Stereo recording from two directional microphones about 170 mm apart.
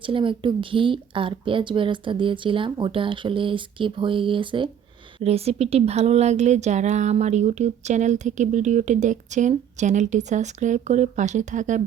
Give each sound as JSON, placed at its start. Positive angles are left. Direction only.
{"t": 0.0, "sound": "speech", "side_deg": -30}